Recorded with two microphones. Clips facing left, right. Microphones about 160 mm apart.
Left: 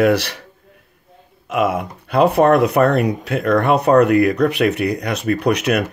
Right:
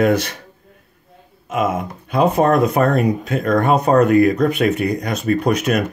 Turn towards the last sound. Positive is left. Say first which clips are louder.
# even
turn(degrees=65)  # may be behind; listen again after turning